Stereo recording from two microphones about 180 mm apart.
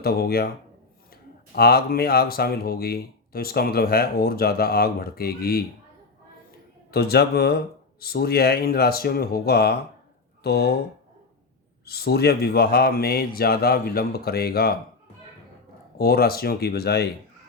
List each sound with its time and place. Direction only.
0.0 s speech: 60° left (ahead or behind)
6.9 s speech: 60° left (ahead or behind)
11.9 s speech: 60° left (ahead or behind)
16.0 s speech: 60° left (ahead or behind)